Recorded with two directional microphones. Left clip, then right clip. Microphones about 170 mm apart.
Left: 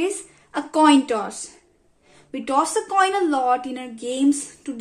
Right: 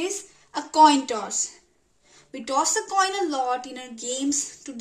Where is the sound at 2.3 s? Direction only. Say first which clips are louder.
Left 3 dB; 20° left (ahead or behind).